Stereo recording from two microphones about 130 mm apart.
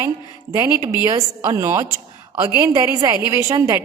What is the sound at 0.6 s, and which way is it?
A woman's voice, 15° right (ahead or behind).